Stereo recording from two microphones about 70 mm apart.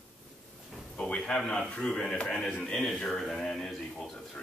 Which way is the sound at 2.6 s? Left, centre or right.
Centre.